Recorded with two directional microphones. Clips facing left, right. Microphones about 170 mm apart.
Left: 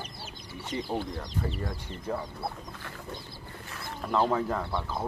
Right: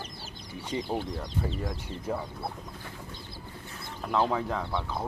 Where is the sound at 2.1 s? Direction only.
10° right (ahead or behind).